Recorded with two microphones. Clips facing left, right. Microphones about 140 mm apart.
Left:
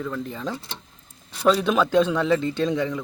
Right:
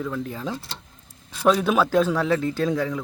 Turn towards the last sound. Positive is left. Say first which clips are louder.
# even
turn(degrees=0)  # may be behind; listen again after turning